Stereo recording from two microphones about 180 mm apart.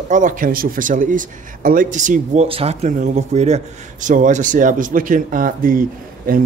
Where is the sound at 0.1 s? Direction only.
45° right (ahead or behind).